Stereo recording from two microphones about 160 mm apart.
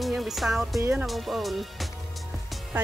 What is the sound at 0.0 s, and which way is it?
Music, centre (ahead or behind).